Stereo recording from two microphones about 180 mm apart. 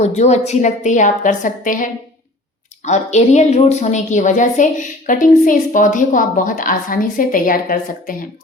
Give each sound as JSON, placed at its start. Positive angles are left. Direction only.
{"t": 0.0, "sound": "a woman's voice", "side_deg": 40}